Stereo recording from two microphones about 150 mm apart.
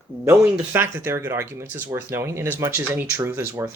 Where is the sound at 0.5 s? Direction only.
15° right (ahead or behind).